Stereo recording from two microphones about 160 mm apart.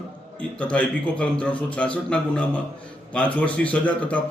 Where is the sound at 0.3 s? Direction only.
10° left (ahead or behind).